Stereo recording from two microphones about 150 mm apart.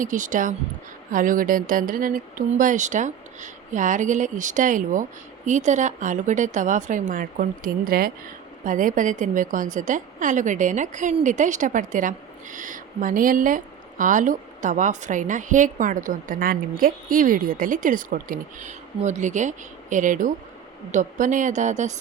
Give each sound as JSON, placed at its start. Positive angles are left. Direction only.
{"t": 0.0, "sound": "a woman's voice", "side_deg": -60}
{"t": 8.6, "sound": "a woman's voice", "side_deg": -60}